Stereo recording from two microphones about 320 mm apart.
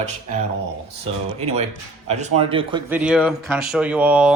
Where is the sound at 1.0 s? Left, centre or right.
Centre.